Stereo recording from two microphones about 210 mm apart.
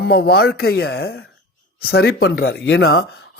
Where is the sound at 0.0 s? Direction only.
50° left (ahead or behind).